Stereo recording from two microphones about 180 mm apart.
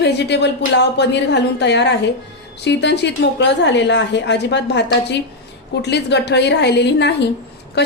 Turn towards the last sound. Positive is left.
turn(degrees=65)  # may be behind; listen again after turning